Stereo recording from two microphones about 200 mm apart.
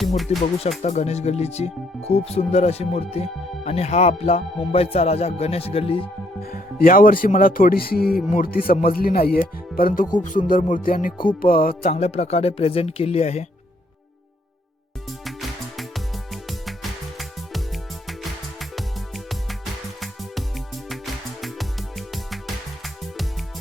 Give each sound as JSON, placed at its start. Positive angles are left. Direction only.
{"t": 0.3, "sound": "speech", "side_deg": 30}
{"t": 6.4, "sound": "speech", "side_deg": 45}
{"t": 11.7, "sound": "speech", "side_deg": 30}
{"t": 15.2, "sound": "music", "side_deg": 0}
{"t": 20.9, "sound": "music", "side_deg": 0}